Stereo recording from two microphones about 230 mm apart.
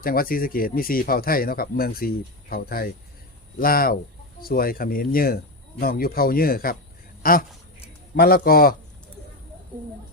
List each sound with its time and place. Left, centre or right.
0.0 s speech: left